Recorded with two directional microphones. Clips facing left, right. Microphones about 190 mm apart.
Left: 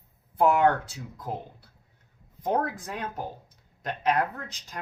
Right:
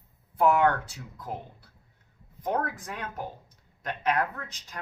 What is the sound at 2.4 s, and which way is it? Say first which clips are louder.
Speech: left 2 dB; 30° left (ahead or behind).